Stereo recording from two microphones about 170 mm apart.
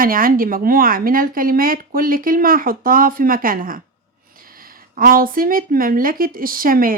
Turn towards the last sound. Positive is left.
turn(degrees=-55)  # may be behind; listen again after turning